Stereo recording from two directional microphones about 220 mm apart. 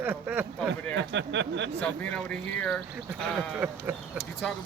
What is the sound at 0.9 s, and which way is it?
Speech, 55° right (ahead or behind).